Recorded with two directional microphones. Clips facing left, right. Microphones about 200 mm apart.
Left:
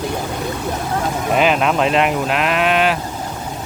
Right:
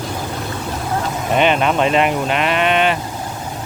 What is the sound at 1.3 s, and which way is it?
Speech, centre (ahead or behind).